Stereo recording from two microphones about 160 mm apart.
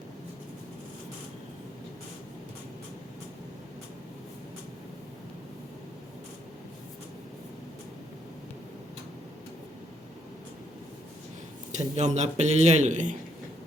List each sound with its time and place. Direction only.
11.8 s speech: 45° right (ahead or behind)